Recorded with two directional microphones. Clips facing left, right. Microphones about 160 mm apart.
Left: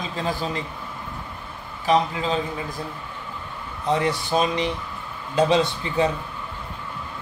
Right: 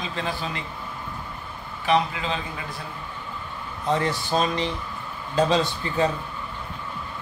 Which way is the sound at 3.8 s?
20° left (ahead or behind).